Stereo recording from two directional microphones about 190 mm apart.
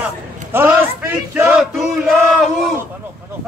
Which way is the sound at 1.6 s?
Centre (ahead or behind).